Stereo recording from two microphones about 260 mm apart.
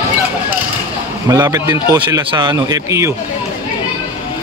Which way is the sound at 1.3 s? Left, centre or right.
Centre.